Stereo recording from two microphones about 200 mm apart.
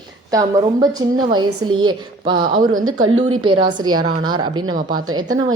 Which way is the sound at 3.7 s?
20° right (ahead or behind).